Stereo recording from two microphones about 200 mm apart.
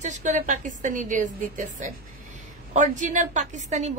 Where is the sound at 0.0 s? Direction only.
35° right (ahead or behind).